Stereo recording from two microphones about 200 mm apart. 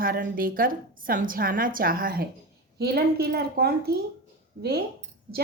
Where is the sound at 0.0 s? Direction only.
45° right (ahead or behind).